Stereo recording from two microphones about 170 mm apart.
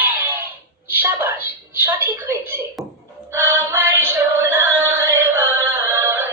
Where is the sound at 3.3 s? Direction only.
15° right (ahead or behind).